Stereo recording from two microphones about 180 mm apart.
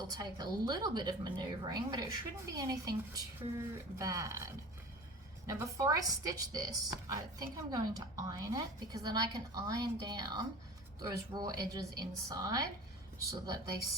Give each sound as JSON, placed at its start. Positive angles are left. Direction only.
{"t": 0.1, "sound": "speech", "side_deg": -20}